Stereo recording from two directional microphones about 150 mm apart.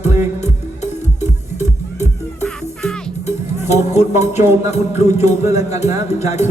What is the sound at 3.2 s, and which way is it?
Music, 45° left (ahead or behind).